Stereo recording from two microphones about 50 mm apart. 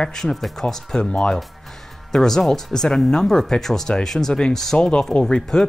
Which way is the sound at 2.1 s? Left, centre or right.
Centre.